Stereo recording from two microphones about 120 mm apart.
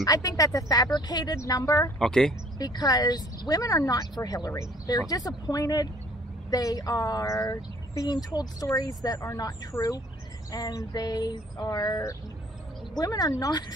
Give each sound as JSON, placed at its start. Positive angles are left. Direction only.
{"t": 0.0, "sound": "speech", "side_deg": 30}
{"t": 2.0, "sound": "speech", "side_deg": 5}
{"t": 2.6, "sound": "speech", "side_deg": 30}